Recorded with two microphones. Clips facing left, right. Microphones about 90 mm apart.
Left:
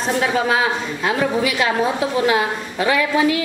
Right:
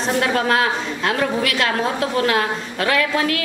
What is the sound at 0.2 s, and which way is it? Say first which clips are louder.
A woman's voice: even; 5° left (ahead or behind).